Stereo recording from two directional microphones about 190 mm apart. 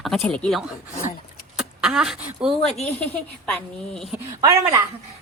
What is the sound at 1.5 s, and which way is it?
Speech, 5° right (ahead or behind).